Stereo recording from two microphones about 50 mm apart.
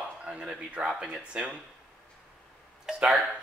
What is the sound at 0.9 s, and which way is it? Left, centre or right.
Speech, centre.